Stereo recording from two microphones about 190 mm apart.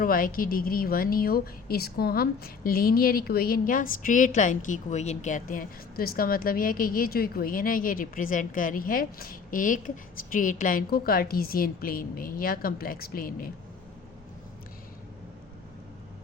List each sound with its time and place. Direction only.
0.0 s a woman's voice: 50° left (ahead or behind)